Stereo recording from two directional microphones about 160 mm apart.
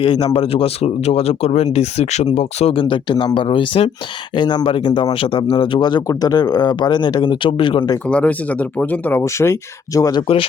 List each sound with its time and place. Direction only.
0.0 s speech: 30° left (ahead or behind)
2.8 s a man's voice: 30° left (ahead or behind)
8.0 s speech: 10° left (ahead or behind)